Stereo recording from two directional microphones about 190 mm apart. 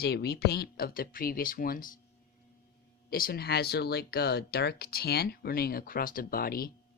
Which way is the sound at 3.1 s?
50° left (ahead or behind).